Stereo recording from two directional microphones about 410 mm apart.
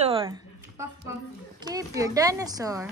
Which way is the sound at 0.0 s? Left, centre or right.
Centre.